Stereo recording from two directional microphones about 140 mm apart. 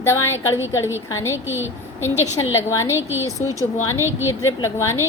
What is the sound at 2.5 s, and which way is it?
Speech, 20° left (ahead or behind).